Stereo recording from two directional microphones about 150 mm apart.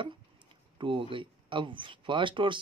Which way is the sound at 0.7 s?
35° right (ahead or behind).